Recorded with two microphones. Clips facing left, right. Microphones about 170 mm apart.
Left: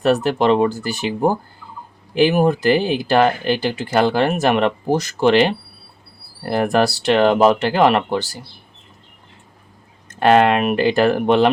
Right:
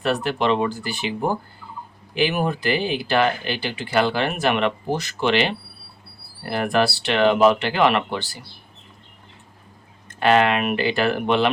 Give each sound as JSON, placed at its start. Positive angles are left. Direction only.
{"t": 0.0, "sound": "speech", "side_deg": 45}
{"t": 10.2, "sound": "speech", "side_deg": 45}